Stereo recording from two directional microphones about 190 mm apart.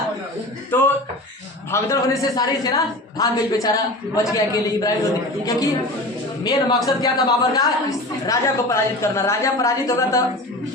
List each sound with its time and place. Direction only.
0.7 s a sound: 10° left (ahead or behind)
1.7 s a man's voice: 20° left (ahead or behind)
6.4 s a man's voice: 20° left (ahead or behind)